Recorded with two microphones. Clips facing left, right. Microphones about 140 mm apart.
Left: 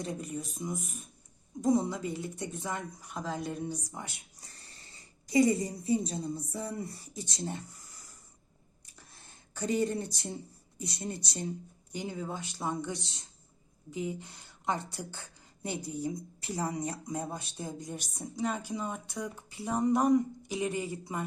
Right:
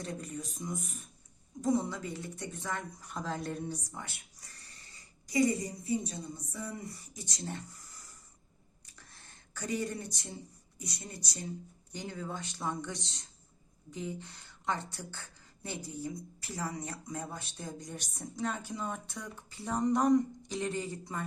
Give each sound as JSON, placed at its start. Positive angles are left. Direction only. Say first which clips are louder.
{"t": 0.0, "sound": "speech", "louder": "left 3 dB", "side_deg": 10}
{"t": 3.9, "sound": "speech", "louder": "left 2 dB", "side_deg": 15}
{"t": 4.9, "sound": "a woman's voice", "louder": "left 7 dB", "side_deg": 25}
{"t": 9.6, "sound": "a woman's voice", "louder": "left 5 dB", "side_deg": 25}
{"t": 11.9, "sound": "speech", "louder": "left 3 dB", "side_deg": 10}
{"t": 17.7, "sound": "speech", "louder": "left 2 dB", "side_deg": 5}